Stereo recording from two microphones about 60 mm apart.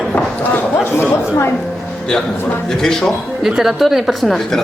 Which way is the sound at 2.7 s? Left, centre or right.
Centre.